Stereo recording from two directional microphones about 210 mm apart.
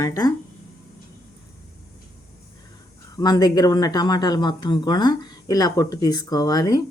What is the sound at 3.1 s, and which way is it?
Speech, 20° left (ahead or behind).